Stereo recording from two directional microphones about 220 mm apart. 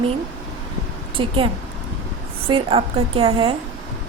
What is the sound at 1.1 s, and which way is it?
A woman's voice, 25° right (ahead or behind).